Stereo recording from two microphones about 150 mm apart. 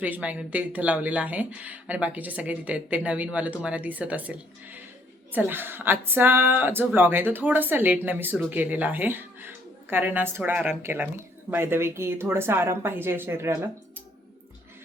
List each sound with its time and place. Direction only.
0.0 s speech: 10° right (ahead or behind)